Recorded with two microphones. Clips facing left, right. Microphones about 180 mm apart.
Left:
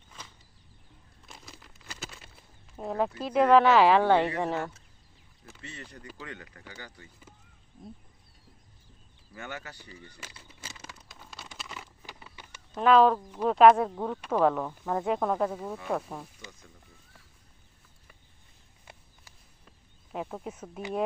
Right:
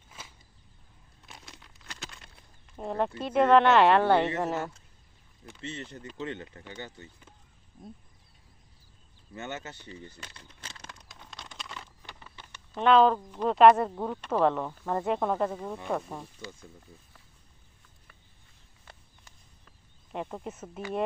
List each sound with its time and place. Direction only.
0.1 s a sound: 10° right (ahead or behind)
3.2 s speech: centre (ahead or behind)
5.6 s speech: 25° right (ahead or behind)
9.3 s speech: 25° right (ahead or behind)
10.2 s a sound: 5° left (ahead or behind)
12.7 s speech: centre (ahead or behind)
20.1 s speech: centre (ahead or behind)